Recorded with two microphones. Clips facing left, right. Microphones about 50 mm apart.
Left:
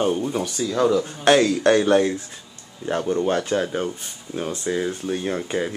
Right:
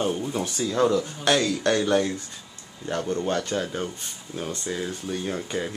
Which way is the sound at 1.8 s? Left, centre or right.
Centre.